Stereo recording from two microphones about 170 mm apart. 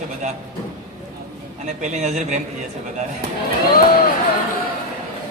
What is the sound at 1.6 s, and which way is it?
Speech, 45° right (ahead or behind).